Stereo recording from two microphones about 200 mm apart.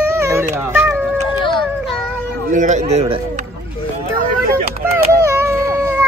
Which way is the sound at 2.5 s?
35° right (ahead or behind).